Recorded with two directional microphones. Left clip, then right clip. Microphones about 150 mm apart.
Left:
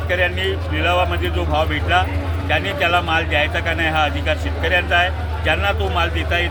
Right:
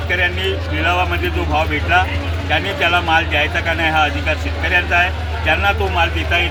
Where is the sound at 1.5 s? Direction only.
30° left (ahead or behind).